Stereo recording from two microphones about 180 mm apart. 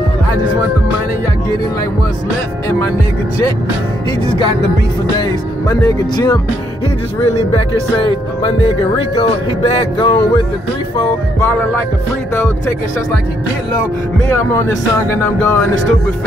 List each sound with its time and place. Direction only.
5.7 s speech: 20° left (ahead or behind)
8.0 s speech: 30° left (ahead or behind)
15.0 s music: 15° left (ahead or behind)